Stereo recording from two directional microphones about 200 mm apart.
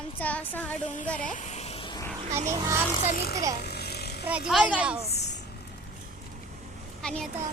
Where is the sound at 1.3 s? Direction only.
35° left (ahead or behind).